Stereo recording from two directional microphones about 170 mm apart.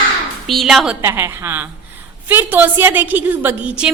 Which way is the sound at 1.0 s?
15° right (ahead or behind).